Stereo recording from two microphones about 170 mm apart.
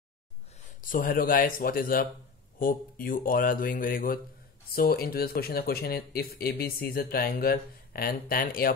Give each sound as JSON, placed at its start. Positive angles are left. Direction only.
{"t": 0.7, "sound": "speech", "side_deg": 55}